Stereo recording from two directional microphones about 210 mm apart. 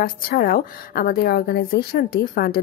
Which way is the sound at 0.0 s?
45° left (ahead or behind).